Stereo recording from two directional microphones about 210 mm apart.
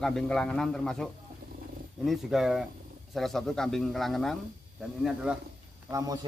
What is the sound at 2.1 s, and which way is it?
Speech, centre (ahead or behind).